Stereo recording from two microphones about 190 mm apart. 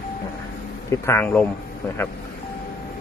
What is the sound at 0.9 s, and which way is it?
Speech, 15° left (ahead or behind).